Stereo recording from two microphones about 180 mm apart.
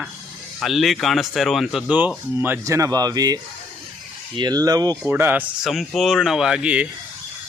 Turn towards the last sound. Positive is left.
turn(degrees=-5)  # may be behind; listen again after turning